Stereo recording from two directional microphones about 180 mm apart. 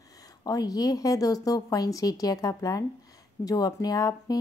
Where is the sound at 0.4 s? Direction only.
20° left (ahead or behind).